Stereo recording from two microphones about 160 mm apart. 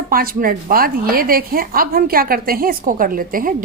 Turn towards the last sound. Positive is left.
turn(degrees=-60)  # may be behind; listen again after turning